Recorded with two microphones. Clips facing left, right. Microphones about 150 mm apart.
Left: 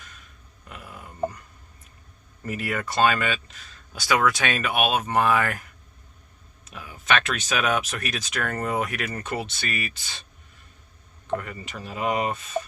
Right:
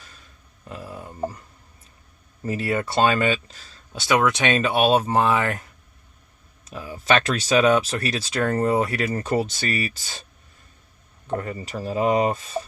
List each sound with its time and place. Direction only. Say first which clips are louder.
0.0 s a sound: even; 35° right (ahead or behind)
2.4 s speech: right 5 dB; 30° right (ahead or behind)
6.7 s speech: right 4 dB; 35° right (ahead or behind)
11.3 s speech: right 6 dB; 35° right (ahead or behind)